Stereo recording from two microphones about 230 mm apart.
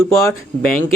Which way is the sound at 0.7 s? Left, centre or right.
Left.